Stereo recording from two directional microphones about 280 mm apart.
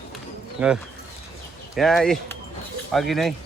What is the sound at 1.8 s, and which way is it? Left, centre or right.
A man's voice, centre.